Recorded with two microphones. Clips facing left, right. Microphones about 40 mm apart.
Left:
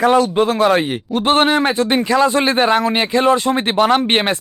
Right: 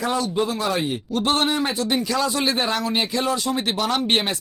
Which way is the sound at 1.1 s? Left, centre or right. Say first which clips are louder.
Left 7 dB; left.